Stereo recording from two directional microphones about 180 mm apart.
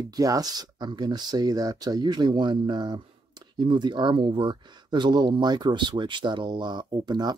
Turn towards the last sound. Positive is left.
turn(degrees=-25)  # may be behind; listen again after turning